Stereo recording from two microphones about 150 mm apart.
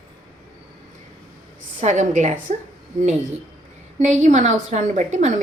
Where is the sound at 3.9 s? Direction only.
50° right (ahead or behind).